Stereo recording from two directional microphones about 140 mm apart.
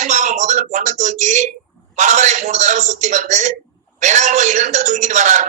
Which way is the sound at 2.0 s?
60° right (ahead or behind).